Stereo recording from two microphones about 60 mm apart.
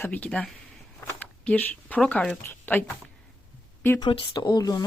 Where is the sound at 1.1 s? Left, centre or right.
Left.